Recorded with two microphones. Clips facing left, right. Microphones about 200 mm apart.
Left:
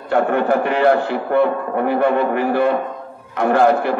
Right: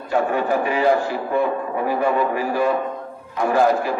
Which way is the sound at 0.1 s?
60° left (ahead or behind).